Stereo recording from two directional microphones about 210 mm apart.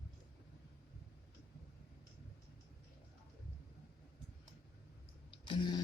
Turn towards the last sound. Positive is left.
turn(degrees=20)  # may be behind; listen again after turning